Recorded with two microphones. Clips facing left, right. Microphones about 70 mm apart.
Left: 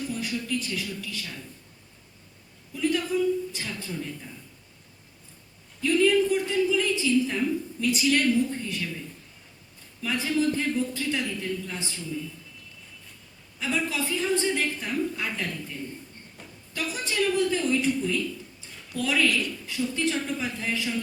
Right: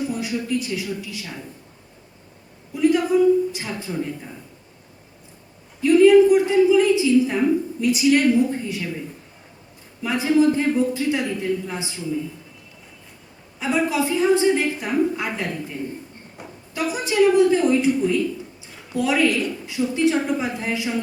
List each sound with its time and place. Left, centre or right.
0.0 s a woman's voice: centre
2.7 s a man's voice: centre
5.8 s a man's voice: centre
13.6 s a woman's voice: centre
18.7 s a sound: centre
19.6 s a man's voice: centre